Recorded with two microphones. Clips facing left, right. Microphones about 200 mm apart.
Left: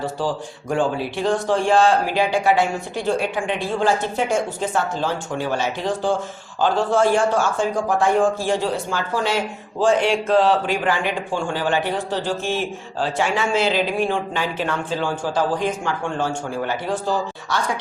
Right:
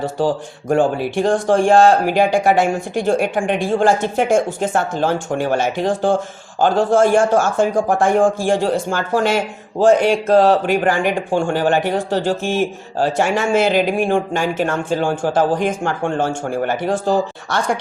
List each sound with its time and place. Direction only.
0.7 s speech: 50° right (ahead or behind)